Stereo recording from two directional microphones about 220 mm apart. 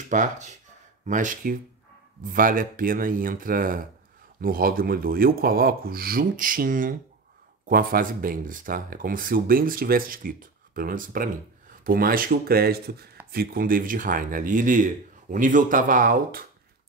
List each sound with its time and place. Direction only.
0.1 s speech: 35° right (ahead or behind)